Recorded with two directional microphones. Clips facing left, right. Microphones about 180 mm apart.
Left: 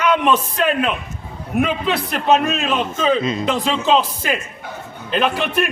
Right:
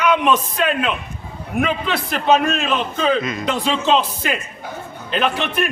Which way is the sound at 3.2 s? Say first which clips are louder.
Left 4 dB; 30° left (ahead or behind).